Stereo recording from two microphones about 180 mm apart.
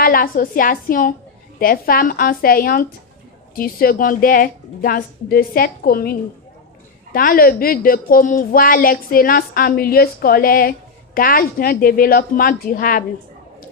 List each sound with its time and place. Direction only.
0.0 s a woman's voice: 55° left (ahead or behind)